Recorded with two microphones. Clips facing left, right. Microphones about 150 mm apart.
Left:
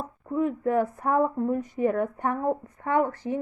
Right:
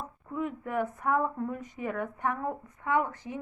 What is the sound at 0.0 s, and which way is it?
A woman's voice, 35° left (ahead or behind).